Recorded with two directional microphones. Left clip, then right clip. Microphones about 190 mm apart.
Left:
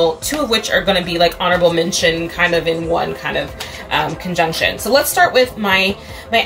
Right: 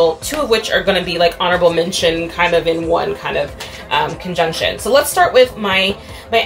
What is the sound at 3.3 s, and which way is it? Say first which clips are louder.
Speech: right 2 dB; centre (ahead or behind).